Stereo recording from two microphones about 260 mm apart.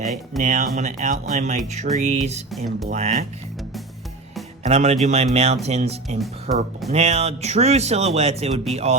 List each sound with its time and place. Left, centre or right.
0.4 s speech: right
2.5 s speech: centre
2.9 s speech: right
4.6 s speech: right